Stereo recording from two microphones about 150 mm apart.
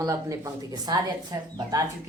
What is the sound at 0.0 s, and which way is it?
A woman's voice, 20° right (ahead or behind).